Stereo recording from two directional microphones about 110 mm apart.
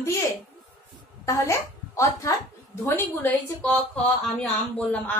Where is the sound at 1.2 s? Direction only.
30° left (ahead or behind).